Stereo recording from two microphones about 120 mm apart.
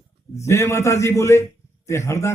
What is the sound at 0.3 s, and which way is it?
A man's voice, 25° left (ahead or behind).